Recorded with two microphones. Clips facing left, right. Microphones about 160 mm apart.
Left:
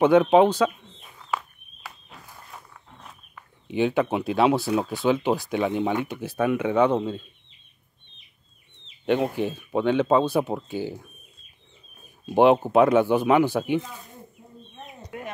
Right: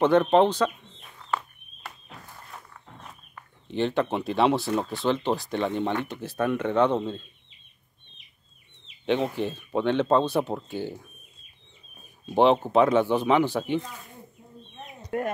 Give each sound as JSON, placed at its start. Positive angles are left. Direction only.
{"t": 0.0, "sound": "speech", "side_deg": 5}
{"t": 9.0, "sound": "speech", "side_deg": 5}
{"t": 12.6, "sound": "speech", "side_deg": 5}
{"t": 15.0, "sound": "speech", "side_deg": -50}